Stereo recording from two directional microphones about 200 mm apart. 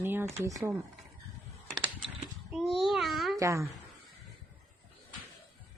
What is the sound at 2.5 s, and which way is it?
Speech, centre (ahead or behind).